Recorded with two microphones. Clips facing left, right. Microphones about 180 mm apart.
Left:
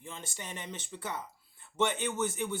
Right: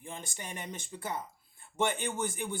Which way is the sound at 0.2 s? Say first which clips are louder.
Even; 10° right (ahead or behind).